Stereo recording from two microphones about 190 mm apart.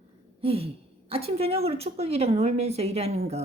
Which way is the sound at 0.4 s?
30° right (ahead or behind).